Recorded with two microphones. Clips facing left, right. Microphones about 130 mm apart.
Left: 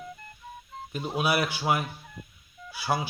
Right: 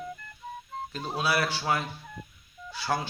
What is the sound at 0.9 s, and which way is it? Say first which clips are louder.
Speech: left 2 dB; 15° left (ahead or behind).